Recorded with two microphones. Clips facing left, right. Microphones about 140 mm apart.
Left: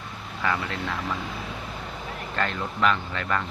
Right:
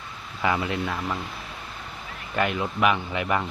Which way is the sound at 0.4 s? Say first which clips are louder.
Right 3 dB; 15° right (ahead or behind).